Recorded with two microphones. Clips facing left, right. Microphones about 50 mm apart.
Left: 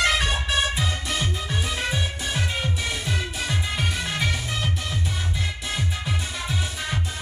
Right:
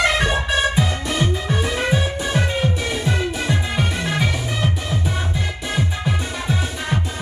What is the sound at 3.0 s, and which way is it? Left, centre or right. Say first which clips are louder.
Music: right 6 dB; right.